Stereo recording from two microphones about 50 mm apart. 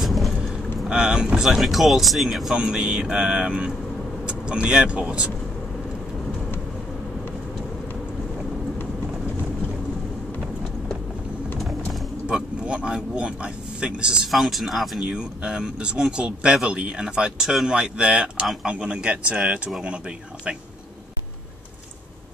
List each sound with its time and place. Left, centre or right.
0.0 s vehicle: centre
0.8 s speech: centre
2.5 s speech: centre
12.3 s a sound: centre
14.3 s speech: centre
15.0 s speech: centre